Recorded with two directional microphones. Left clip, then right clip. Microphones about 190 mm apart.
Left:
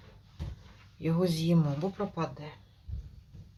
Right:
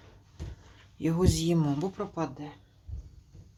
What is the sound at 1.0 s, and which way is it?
Speech, 60° right (ahead or behind).